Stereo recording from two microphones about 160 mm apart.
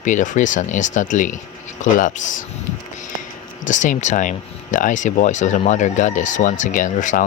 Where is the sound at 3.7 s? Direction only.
50° left (ahead or behind).